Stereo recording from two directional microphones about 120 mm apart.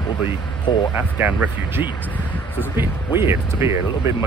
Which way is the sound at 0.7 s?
40° left (ahead or behind).